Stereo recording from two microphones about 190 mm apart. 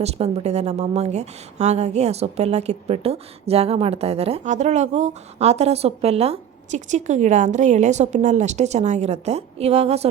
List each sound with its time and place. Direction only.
0.0 s a woman's voice: 35° right (ahead or behind)